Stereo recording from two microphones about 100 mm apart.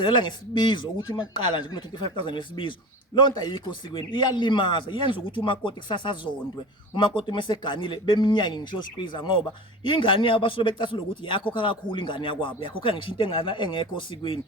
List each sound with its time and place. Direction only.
0.0 s speech: 50° left (ahead or behind)